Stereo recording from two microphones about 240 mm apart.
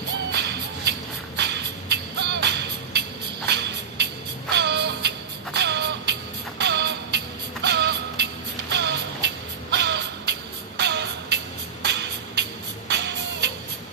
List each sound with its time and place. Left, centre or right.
0.3 s music: right